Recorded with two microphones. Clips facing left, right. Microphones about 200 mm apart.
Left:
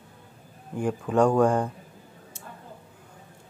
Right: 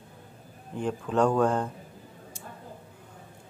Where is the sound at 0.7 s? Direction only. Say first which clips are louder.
Left 3 dB; 10° left (ahead or behind).